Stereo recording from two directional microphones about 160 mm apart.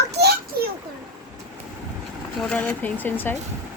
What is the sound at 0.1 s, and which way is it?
Children playing, 85° right.